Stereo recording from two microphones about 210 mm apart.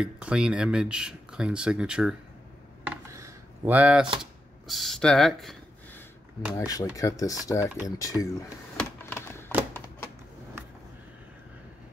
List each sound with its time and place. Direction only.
0.0 s speech: 5° right (ahead or behind)
2.8 s a sound: 10° right (ahead or behind)
6.5 s speech: 15° left (ahead or behind)
8.7 s typing: 10° left (ahead or behind)